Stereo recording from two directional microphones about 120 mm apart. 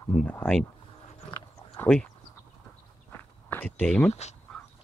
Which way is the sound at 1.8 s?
5° left (ahead or behind).